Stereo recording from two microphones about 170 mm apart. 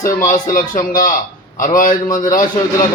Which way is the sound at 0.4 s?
50° left (ahead or behind).